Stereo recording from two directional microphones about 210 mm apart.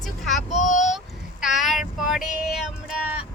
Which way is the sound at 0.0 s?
Centre (ahead or behind).